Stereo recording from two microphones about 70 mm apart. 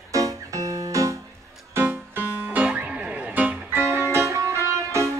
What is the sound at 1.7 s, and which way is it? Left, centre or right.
Music, right.